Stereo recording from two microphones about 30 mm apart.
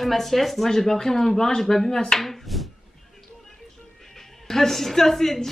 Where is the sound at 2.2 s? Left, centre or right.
Centre.